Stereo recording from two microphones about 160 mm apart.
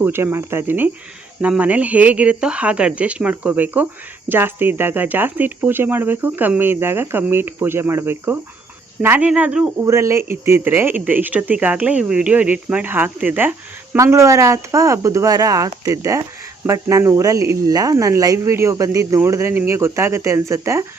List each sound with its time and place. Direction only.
0.0 s speech: 15° right (ahead or behind)
9.8 s speech: 20° right (ahead or behind)